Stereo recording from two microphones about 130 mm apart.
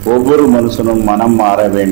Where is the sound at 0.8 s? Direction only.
20° right (ahead or behind).